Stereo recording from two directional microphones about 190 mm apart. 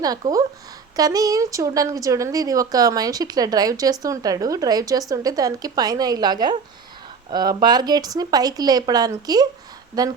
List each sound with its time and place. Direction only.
0.0 s speech: 20° right (ahead or behind)